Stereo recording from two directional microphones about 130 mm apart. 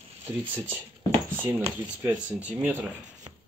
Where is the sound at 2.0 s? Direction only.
10° right (ahead or behind).